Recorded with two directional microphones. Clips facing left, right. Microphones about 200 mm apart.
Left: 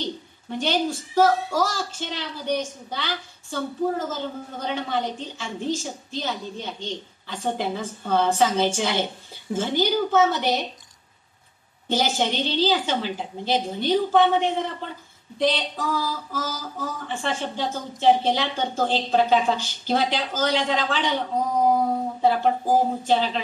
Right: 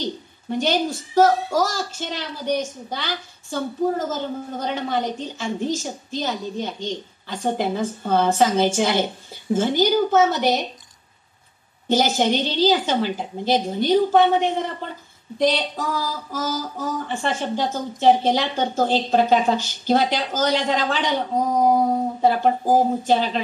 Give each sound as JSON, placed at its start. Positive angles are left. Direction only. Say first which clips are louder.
{"t": 0.5, "sound": "a woman's voice", "louder": "right 3 dB", "side_deg": -40}
{"t": 11.9, "sound": "a woman's voice", "louder": "right 5 dB", "side_deg": -45}